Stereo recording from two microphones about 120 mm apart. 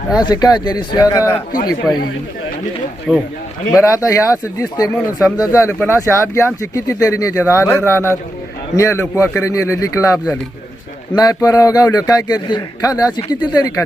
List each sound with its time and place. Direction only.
0.2 s a man's voice: 35° left (ahead or behind)
3.1 s speech: 10° right (ahead or behind)
3.8 s a man's voice: 25° left (ahead or behind)